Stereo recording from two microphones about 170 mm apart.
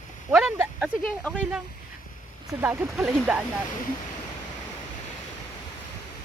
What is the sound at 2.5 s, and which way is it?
Speech, 10° right (ahead or behind).